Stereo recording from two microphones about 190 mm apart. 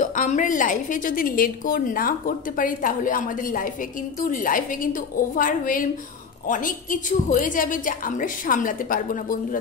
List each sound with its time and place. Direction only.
0.0 s a woman's voice: 40° left (ahead or behind)